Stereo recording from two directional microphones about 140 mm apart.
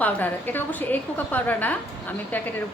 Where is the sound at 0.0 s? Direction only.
10° left (ahead or behind).